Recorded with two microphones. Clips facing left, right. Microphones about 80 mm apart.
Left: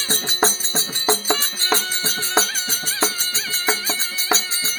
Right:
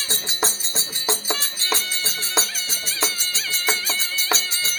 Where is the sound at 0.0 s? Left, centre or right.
Left.